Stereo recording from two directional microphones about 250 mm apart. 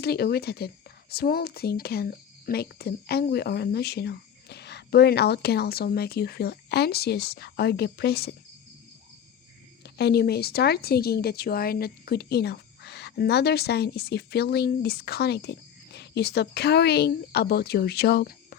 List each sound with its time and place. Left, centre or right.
0.0 s a woman's voice: left
9.8 s a woman's voice: left